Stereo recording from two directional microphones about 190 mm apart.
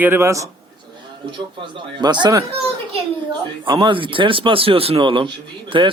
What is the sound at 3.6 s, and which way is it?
Speech, 25° right (ahead or behind).